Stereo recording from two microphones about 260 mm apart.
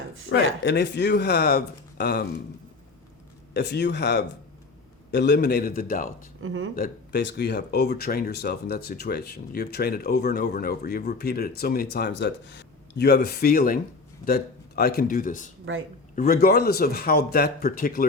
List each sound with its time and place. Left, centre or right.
0.3 s speech: left
3.5 s speech: left
6.4 s speech: right
6.7 s speech: left